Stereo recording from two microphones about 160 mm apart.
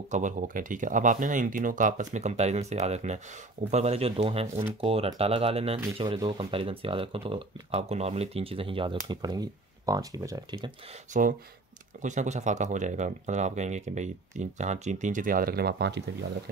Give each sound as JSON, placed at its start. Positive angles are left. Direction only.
{"t": 0.1, "sound": "speech", "side_deg": -55}
{"t": 11.1, "sound": "speech", "side_deg": -50}